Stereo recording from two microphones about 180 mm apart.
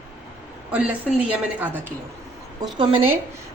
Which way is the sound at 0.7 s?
5° right (ahead or behind).